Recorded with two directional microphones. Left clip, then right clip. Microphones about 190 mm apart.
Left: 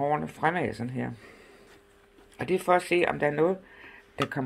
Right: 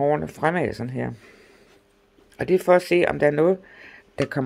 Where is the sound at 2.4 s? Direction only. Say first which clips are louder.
Right 7 dB; 75° right (ahead or behind).